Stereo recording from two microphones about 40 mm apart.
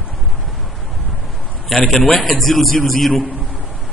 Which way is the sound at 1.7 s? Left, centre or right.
Centre.